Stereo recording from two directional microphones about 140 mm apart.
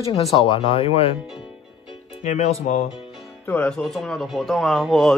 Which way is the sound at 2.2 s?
55° left (ahead or behind).